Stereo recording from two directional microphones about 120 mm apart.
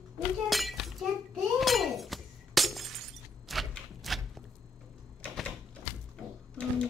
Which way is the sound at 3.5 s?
Centre (ahead or behind).